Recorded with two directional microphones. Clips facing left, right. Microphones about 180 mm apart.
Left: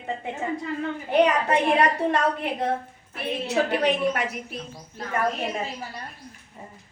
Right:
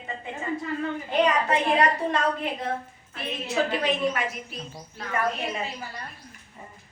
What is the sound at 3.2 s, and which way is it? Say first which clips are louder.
A woman's voice: left 2 dB; 60° left (ahead or behind).